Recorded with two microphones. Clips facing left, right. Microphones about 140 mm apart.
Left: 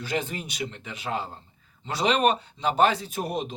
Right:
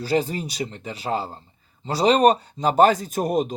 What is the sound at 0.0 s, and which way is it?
Speech, 35° right (ahead or behind).